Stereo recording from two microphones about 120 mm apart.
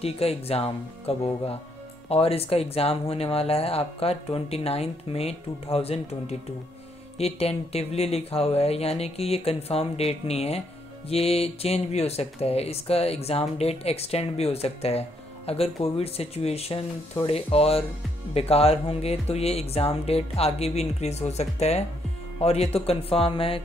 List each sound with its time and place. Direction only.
0.0 s speech: 55° left (ahead or behind)